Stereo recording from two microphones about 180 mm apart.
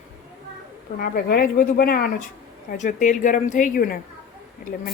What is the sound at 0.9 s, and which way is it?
Speech, 55° left (ahead or behind).